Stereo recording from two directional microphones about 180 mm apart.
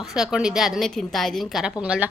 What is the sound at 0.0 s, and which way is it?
A woman's voice, centre (ahead or behind).